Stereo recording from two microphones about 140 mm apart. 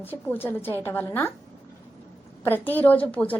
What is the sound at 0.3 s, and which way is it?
A woman's voice, 15° left (ahead or behind).